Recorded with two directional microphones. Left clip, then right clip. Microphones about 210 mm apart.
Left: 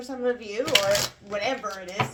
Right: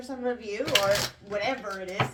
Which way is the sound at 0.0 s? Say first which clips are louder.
Left 4 dB; 35° left (ahead or behind).